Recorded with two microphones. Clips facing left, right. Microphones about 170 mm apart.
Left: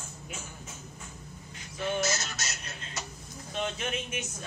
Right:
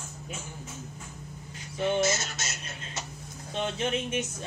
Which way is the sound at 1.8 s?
25° right (ahead or behind).